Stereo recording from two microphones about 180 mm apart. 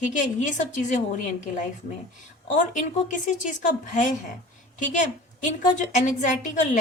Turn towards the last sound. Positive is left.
turn(degrees=45)  # may be behind; listen again after turning